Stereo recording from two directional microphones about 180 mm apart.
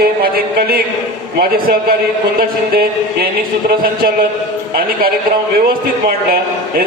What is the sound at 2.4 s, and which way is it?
A man's voice, 55° right (ahead or behind).